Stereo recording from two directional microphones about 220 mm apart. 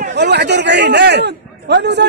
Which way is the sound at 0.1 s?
50° right (ahead or behind).